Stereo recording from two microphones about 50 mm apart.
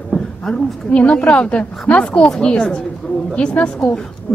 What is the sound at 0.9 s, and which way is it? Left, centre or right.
A woman's voice, left.